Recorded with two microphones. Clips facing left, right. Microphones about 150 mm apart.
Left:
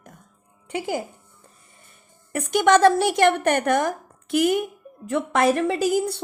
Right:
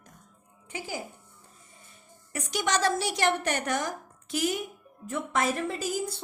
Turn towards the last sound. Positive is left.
turn(degrees=70)  # may be behind; listen again after turning